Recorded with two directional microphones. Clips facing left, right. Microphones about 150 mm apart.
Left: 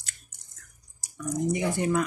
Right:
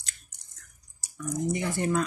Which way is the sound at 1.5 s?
20° left (ahead or behind).